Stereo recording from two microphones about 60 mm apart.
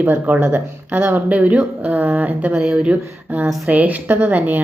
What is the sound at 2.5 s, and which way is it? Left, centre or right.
Speech, centre.